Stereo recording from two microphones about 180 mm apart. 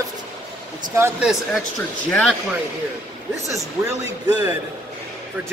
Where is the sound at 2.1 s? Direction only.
5° left (ahead or behind).